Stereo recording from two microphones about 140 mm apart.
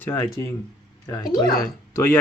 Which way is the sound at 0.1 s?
30° left (ahead or behind).